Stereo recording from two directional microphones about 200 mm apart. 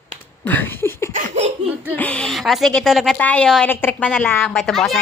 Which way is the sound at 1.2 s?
35° right (ahead or behind).